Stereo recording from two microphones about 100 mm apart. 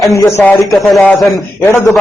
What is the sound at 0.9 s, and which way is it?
Speech, centre (ahead or behind).